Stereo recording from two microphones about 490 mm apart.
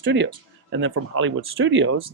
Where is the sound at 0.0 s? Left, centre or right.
Right.